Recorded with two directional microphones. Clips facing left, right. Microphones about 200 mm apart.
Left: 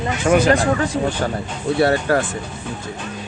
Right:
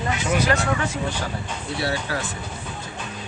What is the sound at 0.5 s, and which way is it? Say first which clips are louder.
Speech: left 6 dB; 35° left (ahead or behind).